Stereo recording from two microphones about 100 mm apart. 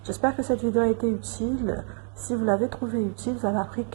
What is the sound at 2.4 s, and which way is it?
Speech, 15° right (ahead or behind).